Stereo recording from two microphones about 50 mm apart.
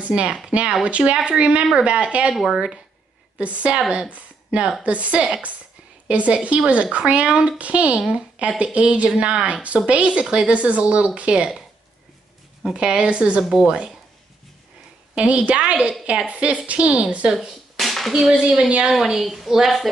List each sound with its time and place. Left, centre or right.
0.0 s speech: right
3.3 s a woman's voice: right
12.7 s speech: centre
15.1 s speech: right
17.7 s a sound: centre
18.4 s a woman's voice: centre